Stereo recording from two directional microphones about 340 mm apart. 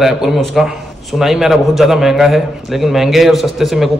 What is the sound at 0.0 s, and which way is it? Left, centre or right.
A man's voice, centre.